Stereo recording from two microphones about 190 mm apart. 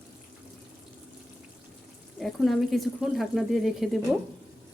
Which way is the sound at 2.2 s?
Centre (ahead or behind).